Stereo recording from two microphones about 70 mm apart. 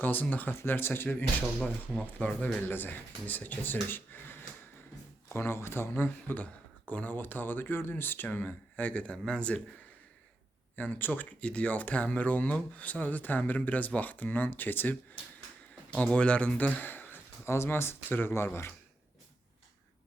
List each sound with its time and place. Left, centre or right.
0.0 s speech: left
2.2 s speech: left
10.8 s speech: left
15.9 s speech: centre; by 18.7 s left